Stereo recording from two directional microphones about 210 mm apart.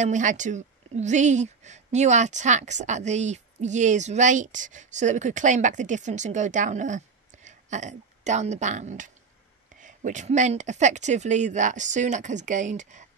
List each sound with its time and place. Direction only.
0.0 s a woman's voice: 35° right (ahead or behind)